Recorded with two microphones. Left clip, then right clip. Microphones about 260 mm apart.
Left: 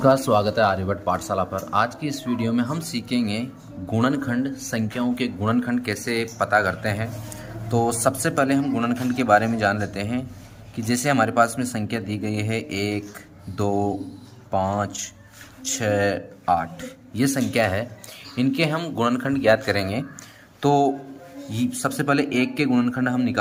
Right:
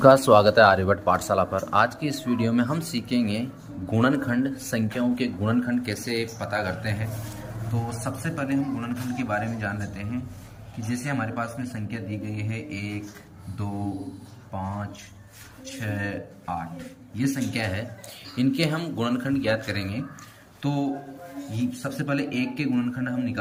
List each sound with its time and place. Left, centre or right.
0.0 s a man's voice: centre; by 13.0 s left
15.6 s a man's voice: left